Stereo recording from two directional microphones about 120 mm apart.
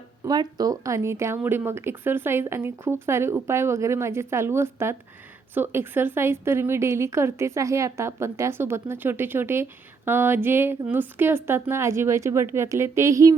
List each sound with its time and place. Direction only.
0.3 s a woman's voice: 35° right (ahead or behind)